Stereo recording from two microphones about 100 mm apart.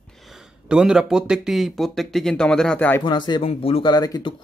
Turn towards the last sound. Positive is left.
turn(degrees=45)  # may be behind; listen again after turning